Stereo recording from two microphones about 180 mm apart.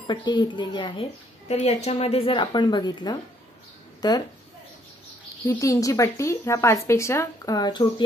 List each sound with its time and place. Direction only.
0.0 s speech: 25° left (ahead or behind)
1.5 s speech: 35° left (ahead or behind); by 4.2 s 20° left (ahead or behind)
5.5 s a woman's voice: 20° left (ahead or behind)